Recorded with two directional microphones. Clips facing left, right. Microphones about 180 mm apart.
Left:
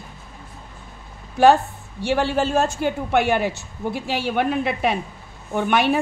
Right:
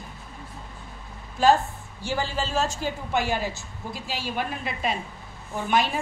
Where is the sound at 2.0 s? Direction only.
65° left (ahead or behind).